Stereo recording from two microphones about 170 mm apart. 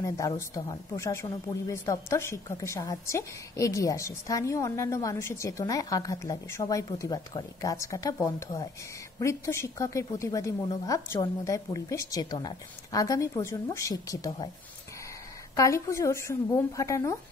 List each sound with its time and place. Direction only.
0.0 s speech: 20° left (ahead or behind)
15.5 s a woman's voice: 20° left (ahead or behind)